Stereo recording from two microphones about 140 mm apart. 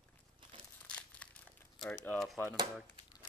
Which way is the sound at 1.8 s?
5° left (ahead or behind).